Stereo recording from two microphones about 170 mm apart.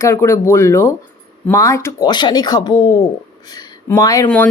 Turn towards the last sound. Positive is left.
turn(degrees=20)  # may be behind; listen again after turning